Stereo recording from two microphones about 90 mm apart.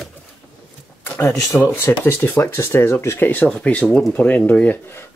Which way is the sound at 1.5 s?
25° left (ahead or behind).